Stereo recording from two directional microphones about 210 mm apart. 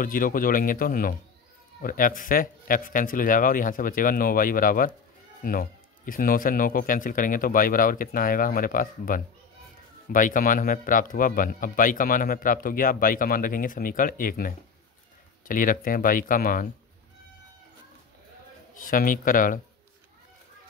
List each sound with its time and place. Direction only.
0.0 s speech: 40° left (ahead or behind)
18.8 s speech: 40° left (ahead or behind)